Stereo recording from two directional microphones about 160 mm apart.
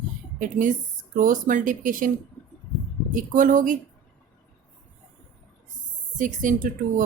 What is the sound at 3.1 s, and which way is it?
Speech, 60° right (ahead or behind).